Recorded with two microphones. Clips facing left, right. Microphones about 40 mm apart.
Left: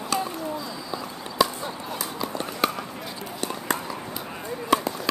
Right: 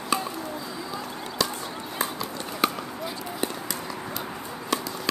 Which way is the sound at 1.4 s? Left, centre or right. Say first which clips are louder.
Left 6 dB; centre.